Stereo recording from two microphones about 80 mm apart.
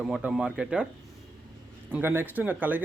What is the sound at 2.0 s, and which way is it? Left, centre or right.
Speech, right.